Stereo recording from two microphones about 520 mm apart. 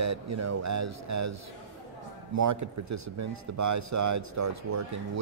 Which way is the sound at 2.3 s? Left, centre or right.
Right.